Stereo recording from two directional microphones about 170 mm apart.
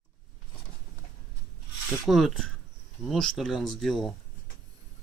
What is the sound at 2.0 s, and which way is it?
Speech, centre (ahead or behind).